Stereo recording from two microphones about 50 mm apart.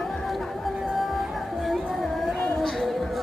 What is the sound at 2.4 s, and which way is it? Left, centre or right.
Music, centre.